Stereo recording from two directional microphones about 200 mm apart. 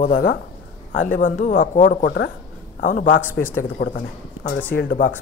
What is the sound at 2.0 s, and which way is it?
Speech, 60° left (ahead or behind).